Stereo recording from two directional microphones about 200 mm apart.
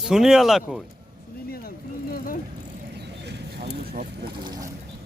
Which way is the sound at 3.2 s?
55° right (ahead or behind).